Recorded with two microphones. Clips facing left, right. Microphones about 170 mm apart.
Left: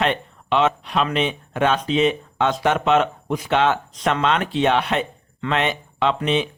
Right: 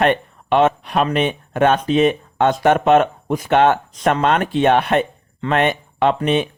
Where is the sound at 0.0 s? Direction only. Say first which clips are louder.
Right 5 dB; 50° right (ahead or behind).